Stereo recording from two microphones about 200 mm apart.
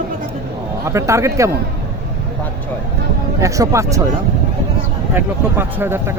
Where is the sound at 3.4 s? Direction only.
15° right (ahead or behind).